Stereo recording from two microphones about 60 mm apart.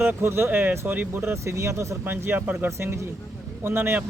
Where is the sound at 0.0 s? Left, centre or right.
Right.